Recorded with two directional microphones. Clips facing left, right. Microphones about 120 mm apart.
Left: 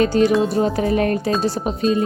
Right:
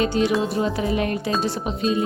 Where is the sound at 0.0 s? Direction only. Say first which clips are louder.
Left 5 dB; 45° left (ahead or behind).